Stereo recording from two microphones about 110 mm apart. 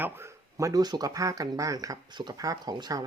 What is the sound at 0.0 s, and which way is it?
Speech, 25° right (ahead or behind).